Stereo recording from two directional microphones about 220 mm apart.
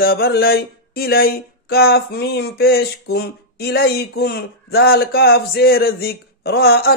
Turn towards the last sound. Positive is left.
turn(degrees=45)  # may be behind; listen again after turning